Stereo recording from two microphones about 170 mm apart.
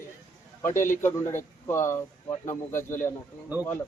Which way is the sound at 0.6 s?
15° left (ahead or behind).